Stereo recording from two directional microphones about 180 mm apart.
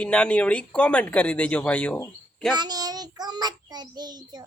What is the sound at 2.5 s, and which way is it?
Child singing, 20° right (ahead or behind).